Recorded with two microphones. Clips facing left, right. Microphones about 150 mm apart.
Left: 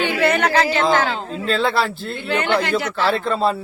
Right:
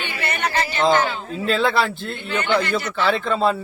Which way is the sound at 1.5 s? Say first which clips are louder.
Even; centre (ahead or behind).